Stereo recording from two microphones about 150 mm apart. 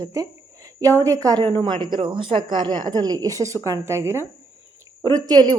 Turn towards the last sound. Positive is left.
turn(degrees=-30)  # may be behind; listen again after turning